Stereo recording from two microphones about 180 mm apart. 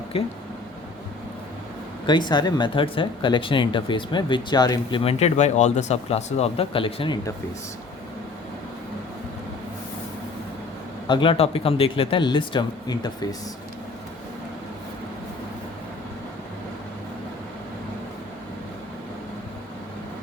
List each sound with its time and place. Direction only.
2.0 s speech: 25° left (ahead or behind)
11.1 s speech: 30° left (ahead or behind)